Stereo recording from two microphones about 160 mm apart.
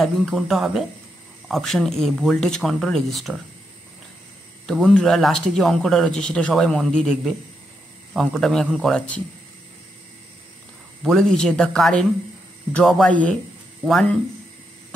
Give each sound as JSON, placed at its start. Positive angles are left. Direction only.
{"t": 0.0, "sound": "speech", "side_deg": 0}
{"t": 4.6, "sound": "speech", "side_deg": 5}
{"t": 11.0, "sound": "speech", "side_deg": 0}